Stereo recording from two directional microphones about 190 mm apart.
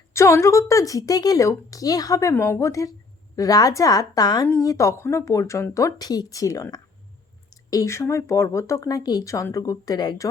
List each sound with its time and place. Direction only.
0.1 s a woman's voice: 15° left (ahead or behind)